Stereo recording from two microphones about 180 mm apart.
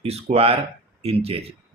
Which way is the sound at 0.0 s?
35° right (ahead or behind).